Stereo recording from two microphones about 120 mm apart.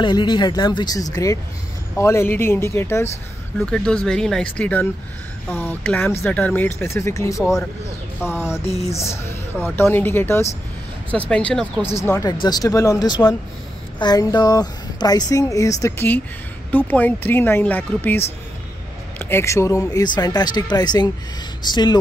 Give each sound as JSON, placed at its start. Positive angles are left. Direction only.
{"t": 0.0, "sound": "speech", "side_deg": 40}
{"t": 3.7, "sound": "speech", "side_deg": 5}
{"t": 8.6, "sound": "a sound", "side_deg": 60}
{"t": 9.0, "sound": "speech", "side_deg": 20}
{"t": 12.0, "sound": "speech", "side_deg": 25}